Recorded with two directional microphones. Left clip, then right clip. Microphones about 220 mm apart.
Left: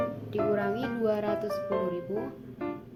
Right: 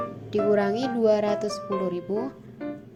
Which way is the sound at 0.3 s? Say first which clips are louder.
Right 8 dB; 25° right (ahead or behind).